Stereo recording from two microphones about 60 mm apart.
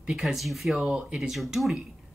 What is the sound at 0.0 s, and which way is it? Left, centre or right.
Speech, centre.